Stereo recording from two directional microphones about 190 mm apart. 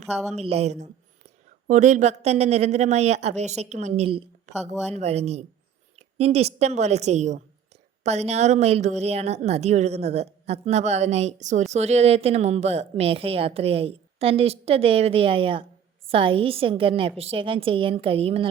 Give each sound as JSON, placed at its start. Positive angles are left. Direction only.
{"t": 0.3, "sound": "a woman's voice", "side_deg": -35}